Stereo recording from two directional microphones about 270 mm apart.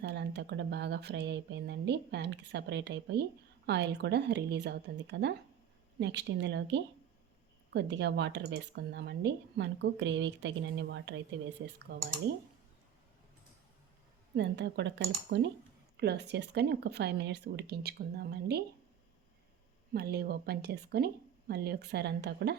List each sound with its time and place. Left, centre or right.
0.0 s speech: right
14.3 s speech: right
19.9 s speech: right